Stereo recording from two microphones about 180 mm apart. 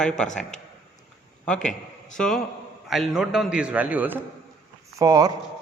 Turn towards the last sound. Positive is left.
turn(degrees=-20)  # may be behind; listen again after turning